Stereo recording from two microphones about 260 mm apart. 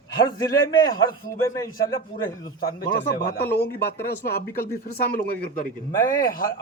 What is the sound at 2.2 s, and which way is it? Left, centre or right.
A man's voice, centre.